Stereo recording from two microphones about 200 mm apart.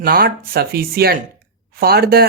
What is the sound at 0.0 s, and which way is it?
Speech, 50° right (ahead or behind).